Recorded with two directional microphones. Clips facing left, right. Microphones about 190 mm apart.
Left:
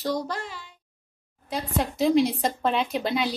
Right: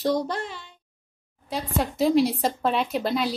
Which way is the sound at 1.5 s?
Centre (ahead or behind).